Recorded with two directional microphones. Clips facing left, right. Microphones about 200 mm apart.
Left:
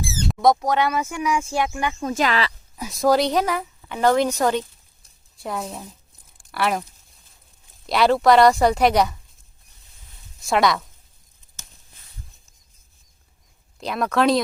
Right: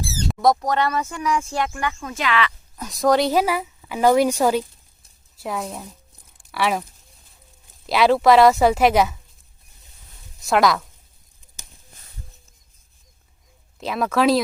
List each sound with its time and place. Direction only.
0.3 s speech: centre (ahead or behind)
2.0 s speech: 40° left (ahead or behind)
2.7 s a woman's voice: 5° left (ahead or behind)
7.9 s speech: centre (ahead or behind)
10.4 s speech: centre (ahead or behind)
13.7 s speech: centre (ahead or behind)